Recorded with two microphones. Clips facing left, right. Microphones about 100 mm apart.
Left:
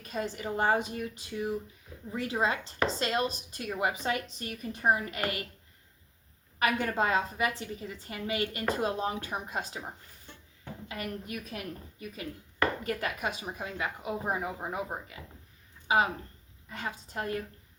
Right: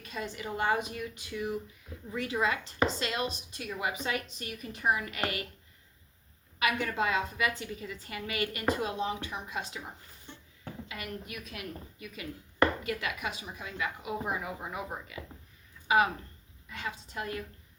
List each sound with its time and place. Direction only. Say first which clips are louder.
0.0 s a woman's voice: left 3 dB; 40° left (ahead or behind)
6.6 s a woman's voice: left 2 dB; 40° left (ahead or behind)
8.7 s a woman's voice: left 3 dB; 40° left (ahead or behind)
10.8 s a woman's voice: left 5 dB; 40° left (ahead or behind)
16.6 s a woman's voice: left 1 dB; 40° left (ahead or behind)